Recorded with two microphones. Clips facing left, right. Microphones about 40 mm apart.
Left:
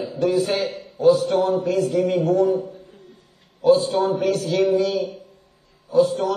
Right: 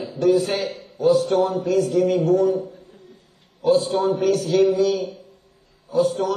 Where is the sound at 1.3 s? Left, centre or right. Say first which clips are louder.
Even; left.